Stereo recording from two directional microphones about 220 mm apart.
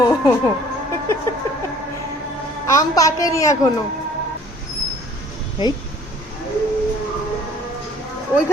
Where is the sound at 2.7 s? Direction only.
15° left (ahead or behind).